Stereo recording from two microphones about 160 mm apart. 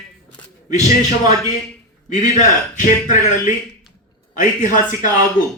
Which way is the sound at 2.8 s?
55° left (ahead or behind).